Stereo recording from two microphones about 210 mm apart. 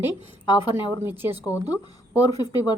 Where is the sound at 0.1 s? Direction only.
20° left (ahead or behind).